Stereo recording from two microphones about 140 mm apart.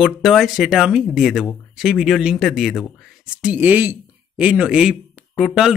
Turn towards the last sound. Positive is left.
turn(degrees=-5)  # may be behind; listen again after turning